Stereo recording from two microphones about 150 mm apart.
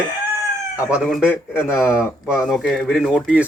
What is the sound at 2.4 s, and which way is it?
Speech, centre (ahead or behind).